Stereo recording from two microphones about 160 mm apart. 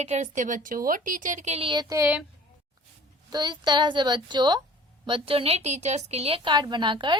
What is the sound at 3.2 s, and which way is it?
A woman's voice, 25° right (ahead or behind).